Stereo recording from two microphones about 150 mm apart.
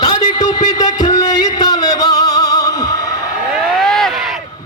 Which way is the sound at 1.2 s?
25° left (ahead or behind).